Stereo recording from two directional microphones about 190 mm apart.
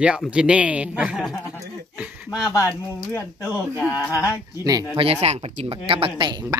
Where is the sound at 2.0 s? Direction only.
5° right (ahead or behind).